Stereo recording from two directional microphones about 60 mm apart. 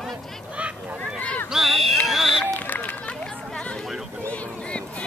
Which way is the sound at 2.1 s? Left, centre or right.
Centre.